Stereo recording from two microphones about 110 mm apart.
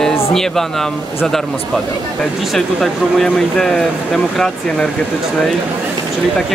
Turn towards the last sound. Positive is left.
turn(degrees=5)  # may be behind; listen again after turning